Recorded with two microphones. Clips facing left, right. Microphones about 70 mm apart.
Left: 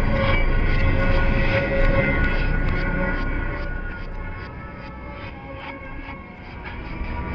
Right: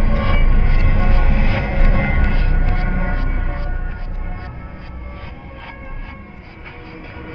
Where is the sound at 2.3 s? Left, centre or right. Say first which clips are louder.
Right 1 dB; centre.